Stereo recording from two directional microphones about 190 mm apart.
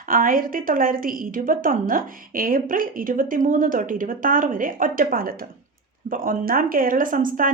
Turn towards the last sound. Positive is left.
turn(degrees=-45)  # may be behind; listen again after turning